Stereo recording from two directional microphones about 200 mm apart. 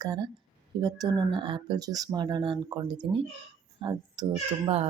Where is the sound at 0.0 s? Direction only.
20° right (ahead or behind).